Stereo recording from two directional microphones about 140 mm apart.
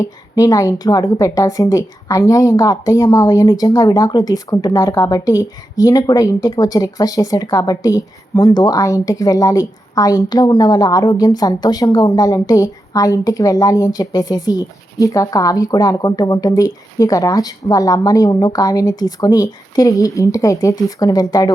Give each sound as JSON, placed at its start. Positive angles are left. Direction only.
{"t": 0.0, "sound": "a woman's voice", "side_deg": 25}